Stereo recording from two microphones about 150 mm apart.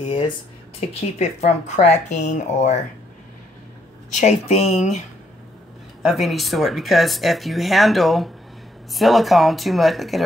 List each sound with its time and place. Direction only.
0.7 s speech: 45° left (ahead or behind)
4.1 s speech: 50° left (ahead or behind)
6.0 s speech: centre (ahead or behind)